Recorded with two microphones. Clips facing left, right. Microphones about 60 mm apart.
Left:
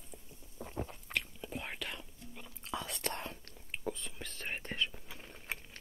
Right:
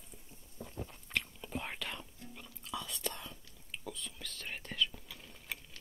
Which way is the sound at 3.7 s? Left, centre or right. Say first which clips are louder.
Left 4 dB; left.